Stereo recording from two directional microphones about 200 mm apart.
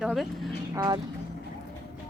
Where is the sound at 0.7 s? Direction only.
20° right (ahead or behind).